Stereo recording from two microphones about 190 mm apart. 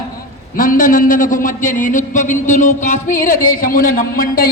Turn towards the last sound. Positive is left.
turn(degrees=50)  # may be behind; listen again after turning